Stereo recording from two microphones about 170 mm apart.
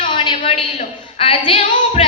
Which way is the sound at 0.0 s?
30° left (ahead or behind).